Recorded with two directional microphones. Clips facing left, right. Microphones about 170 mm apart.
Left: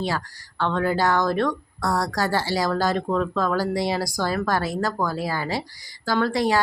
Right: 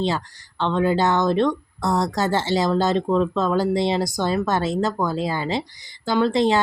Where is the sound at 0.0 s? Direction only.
25° right (ahead or behind).